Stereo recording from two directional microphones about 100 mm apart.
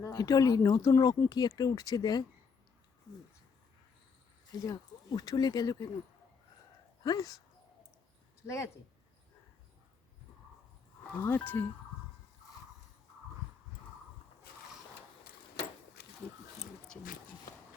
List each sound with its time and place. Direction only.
0.0 s speech: 40° left (ahead or behind)
4.6 s speech: 40° left (ahead or behind)
7.0 s speech: 40° left (ahead or behind)
8.4 s speech: 30° left (ahead or behind)
11.2 s speech: 20° left (ahead or behind)